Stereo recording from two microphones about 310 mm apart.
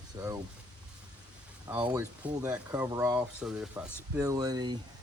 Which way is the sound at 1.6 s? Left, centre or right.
Centre.